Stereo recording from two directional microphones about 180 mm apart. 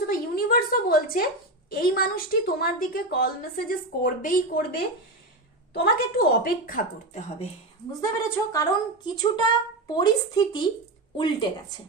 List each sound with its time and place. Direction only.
0.1 s a sound: 50° left (ahead or behind)
1.8 s a woman's voice: 55° left (ahead or behind)
8.2 s speech: 20° left (ahead or behind)